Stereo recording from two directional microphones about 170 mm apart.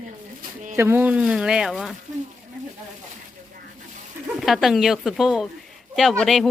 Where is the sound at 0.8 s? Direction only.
15° right (ahead or behind).